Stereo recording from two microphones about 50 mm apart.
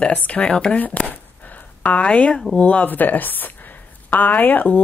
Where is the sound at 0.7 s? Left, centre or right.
Left.